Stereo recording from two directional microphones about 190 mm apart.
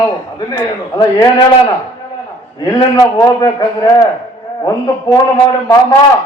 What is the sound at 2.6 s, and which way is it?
A man's voice, 20° left (ahead or behind).